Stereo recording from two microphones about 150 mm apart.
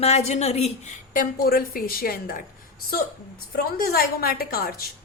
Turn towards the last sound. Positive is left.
turn(degrees=85)